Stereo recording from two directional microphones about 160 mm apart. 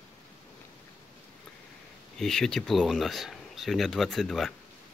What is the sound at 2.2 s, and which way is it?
Speech, 5° left (ahead or behind).